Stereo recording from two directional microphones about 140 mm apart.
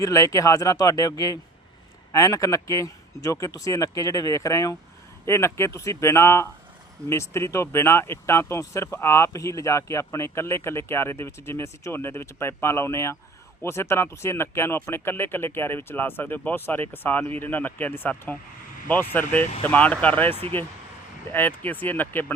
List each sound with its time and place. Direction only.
0.0 s speech: 25° left (ahead or behind)